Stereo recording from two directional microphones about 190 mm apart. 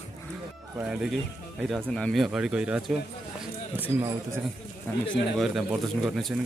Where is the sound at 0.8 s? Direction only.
5° right (ahead or behind).